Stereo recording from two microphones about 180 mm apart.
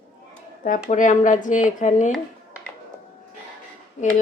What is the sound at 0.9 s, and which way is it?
Speech, 40° left (ahead or behind).